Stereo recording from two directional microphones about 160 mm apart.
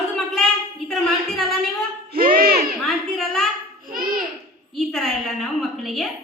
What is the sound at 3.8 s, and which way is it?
Babbling, 60° right (ahead or behind).